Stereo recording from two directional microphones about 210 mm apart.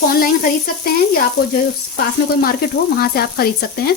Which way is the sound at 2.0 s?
45° left (ahead or behind).